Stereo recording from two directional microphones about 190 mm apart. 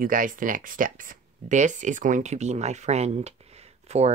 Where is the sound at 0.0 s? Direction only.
45° right (ahead or behind).